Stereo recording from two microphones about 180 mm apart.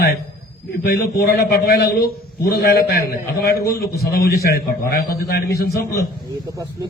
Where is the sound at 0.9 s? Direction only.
60° left (ahead or behind).